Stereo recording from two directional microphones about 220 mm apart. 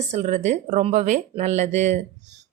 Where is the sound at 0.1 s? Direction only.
30° right (ahead or behind).